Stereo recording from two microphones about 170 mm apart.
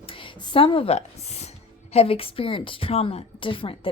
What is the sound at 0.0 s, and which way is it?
A woman's voice, 30° left (ahead or behind).